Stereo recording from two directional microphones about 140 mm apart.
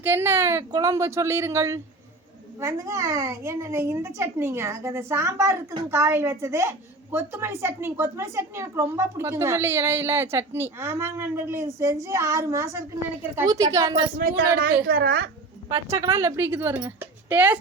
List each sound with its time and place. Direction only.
0.0 s a woman's voice: 15° right (ahead or behind)
14.2 s a woman's voice: 90° right
15.9 s a woman's voice: 20° right (ahead or behind)